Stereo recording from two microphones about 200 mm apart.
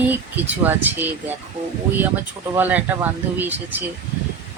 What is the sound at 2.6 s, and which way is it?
Speech, 10° right (ahead or behind).